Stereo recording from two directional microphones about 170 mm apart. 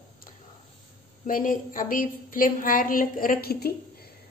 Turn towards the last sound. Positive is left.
turn(degrees=65)  # may be behind; listen again after turning